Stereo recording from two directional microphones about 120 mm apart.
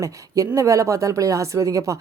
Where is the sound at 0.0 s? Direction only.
25° right (ahead or behind).